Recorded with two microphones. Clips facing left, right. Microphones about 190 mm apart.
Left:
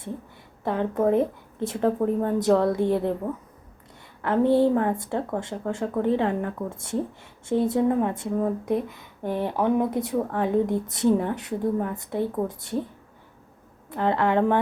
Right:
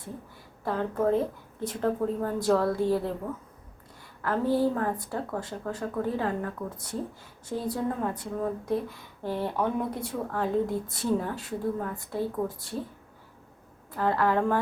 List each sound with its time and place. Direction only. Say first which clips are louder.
0.6 s speech: left 4 dB; 20° left (ahead or behind)
4.2 s speech: left 6 dB; 25° left (ahead or behind)
13.9 s speech: left 3 dB; 25° left (ahead or behind)